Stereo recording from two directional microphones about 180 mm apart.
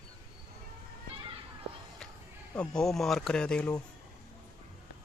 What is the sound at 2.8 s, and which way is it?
Speech, centre (ahead or behind).